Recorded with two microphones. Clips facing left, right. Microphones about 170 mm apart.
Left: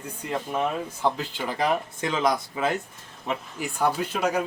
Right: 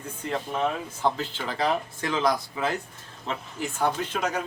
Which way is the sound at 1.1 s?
10° left (ahead or behind).